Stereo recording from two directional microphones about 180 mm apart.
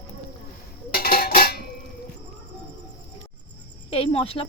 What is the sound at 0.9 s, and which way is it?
Dishes, 55° left (ahead or behind).